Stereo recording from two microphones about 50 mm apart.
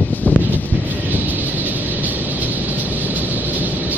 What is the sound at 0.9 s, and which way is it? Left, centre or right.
Music, right.